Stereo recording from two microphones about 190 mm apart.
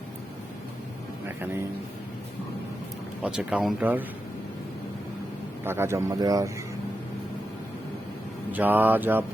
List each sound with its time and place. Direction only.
3.2 s speech: 5° right (ahead or behind)
5.6 s speech: 15° right (ahead or behind)
8.5 s speech: 10° right (ahead or behind)